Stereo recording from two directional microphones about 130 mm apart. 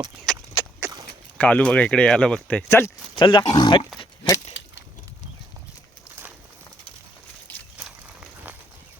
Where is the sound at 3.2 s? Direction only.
40° left (ahead or behind).